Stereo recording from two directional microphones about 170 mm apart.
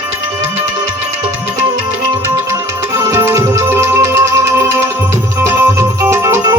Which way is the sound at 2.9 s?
20° right (ahead or behind).